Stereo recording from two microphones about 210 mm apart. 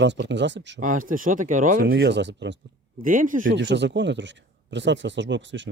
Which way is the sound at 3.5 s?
55° right (ahead or behind).